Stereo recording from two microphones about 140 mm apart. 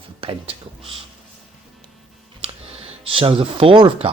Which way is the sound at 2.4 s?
40° right (ahead or behind).